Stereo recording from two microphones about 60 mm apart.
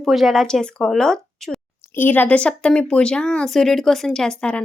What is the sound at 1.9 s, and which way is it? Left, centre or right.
Speech, left.